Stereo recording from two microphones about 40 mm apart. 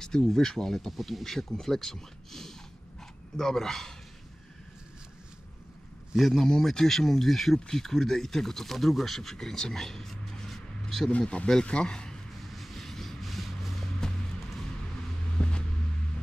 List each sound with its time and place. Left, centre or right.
0.0 s speech: centre
6.1 s a man's voice: centre
6.4 s speech: centre
10.5 s a sound: centre
11.1 s speech: left
12.5 s vehicle: centre
15.3 s a sound: left